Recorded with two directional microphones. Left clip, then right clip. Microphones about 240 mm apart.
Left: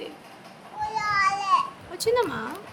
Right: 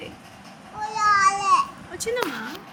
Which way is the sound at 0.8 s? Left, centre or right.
Centre.